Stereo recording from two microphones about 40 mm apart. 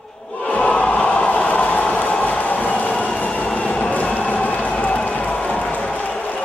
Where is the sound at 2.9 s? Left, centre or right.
Left.